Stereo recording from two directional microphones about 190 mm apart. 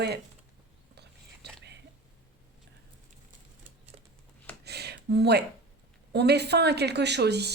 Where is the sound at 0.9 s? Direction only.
60° right (ahead or behind).